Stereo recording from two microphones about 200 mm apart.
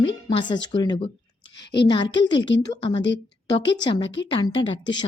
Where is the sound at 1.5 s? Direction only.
60° left (ahead or behind).